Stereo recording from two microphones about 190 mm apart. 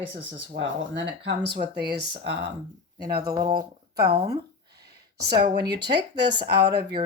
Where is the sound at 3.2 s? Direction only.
20° right (ahead or behind).